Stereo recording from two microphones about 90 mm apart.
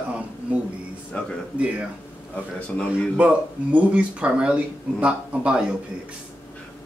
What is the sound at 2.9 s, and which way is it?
Speech, 15° right (ahead or behind).